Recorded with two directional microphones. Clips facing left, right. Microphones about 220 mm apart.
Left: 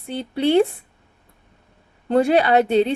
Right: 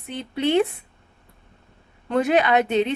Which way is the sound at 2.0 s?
35° left (ahead or behind).